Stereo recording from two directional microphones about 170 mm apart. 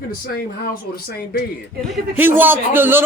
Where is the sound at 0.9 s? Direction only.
65° left (ahead or behind).